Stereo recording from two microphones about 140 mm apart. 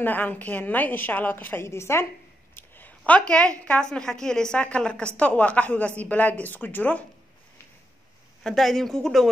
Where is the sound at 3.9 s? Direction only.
5° left (ahead or behind).